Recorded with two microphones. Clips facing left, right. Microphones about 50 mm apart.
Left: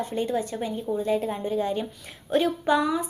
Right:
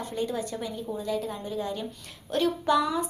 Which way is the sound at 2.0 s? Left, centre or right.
Centre.